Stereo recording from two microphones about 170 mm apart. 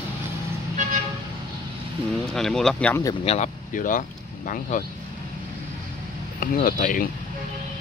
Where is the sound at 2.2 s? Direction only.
5° left (ahead or behind).